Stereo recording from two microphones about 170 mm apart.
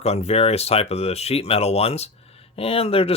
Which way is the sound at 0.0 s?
40° left (ahead or behind).